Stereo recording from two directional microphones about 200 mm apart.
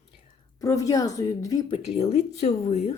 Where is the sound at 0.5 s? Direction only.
15° left (ahead or behind).